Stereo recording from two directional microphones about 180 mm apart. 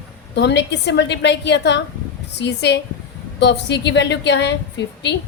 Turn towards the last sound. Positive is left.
turn(degrees=70)  # may be behind; listen again after turning